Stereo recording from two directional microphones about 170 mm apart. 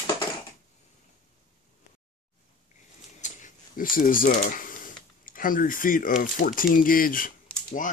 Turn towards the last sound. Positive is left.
turn(degrees=55)  # may be behind; listen again after turning